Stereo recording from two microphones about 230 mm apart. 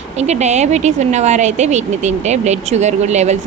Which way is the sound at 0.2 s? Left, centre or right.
Right.